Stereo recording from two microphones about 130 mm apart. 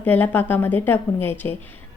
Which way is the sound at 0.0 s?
15° left (ahead or behind).